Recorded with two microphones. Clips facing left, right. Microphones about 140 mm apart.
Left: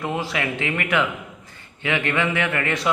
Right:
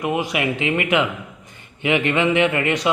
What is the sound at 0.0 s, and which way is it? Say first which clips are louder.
Speech: right 4 dB; 15° right (ahead or behind).